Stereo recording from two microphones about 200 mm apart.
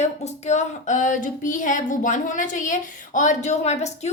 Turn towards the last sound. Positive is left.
turn(degrees=35)  # may be behind; listen again after turning